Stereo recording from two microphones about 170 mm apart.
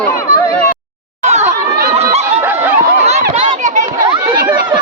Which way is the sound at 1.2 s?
40° right (ahead or behind).